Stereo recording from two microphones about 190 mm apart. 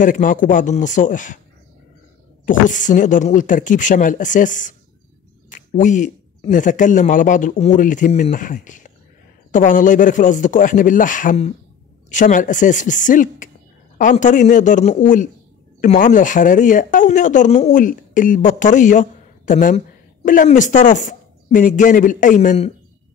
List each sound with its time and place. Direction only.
0.0 s speech: 45° left (ahead or behind)
2.4 s speech: 40° left (ahead or behind)